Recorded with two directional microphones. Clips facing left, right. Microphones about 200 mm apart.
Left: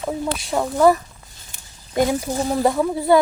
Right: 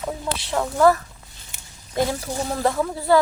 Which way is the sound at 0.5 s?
15° left (ahead or behind).